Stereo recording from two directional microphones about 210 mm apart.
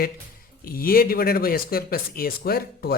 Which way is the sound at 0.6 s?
45° left (ahead or behind).